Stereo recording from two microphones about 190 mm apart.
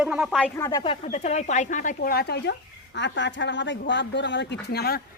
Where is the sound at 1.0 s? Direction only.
35° left (ahead or behind); by 5.0 s 60° left (ahead or behind).